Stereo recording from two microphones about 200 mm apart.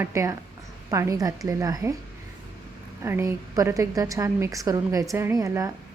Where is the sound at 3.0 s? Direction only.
15° right (ahead or behind).